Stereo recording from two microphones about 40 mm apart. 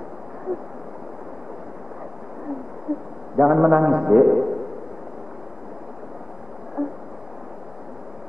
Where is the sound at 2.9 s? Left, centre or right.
Right.